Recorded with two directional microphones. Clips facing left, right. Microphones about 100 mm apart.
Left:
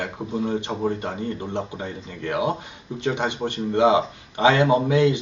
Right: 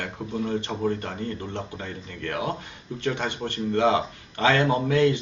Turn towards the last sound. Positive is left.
turn(degrees=15)  # may be behind; listen again after turning